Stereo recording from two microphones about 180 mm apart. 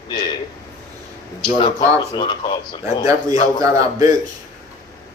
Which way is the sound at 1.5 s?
30° left (ahead or behind).